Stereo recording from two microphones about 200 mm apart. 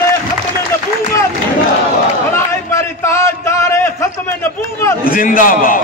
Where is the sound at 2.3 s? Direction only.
15° left (ahead or behind).